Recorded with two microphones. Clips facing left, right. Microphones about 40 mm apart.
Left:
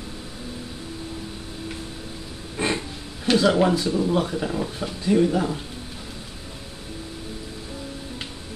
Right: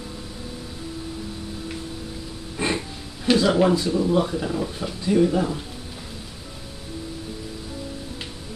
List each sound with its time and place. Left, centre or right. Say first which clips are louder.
3.3 s speech: even; centre
4.1 s speech: right 1 dB; centre